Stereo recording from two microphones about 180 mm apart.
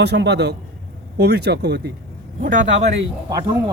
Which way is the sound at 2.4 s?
45° right (ahead or behind).